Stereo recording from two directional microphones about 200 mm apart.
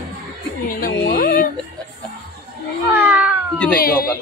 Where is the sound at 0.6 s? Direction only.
45° left (ahead or behind).